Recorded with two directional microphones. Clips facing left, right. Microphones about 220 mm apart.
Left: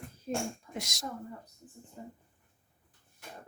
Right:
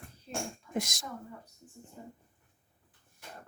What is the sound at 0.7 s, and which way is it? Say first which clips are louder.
Speech: right 6 dB; 50° right (ahead or behind).